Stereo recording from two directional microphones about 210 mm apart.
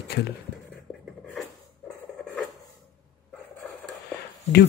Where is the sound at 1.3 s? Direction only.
Centre (ahead or behind).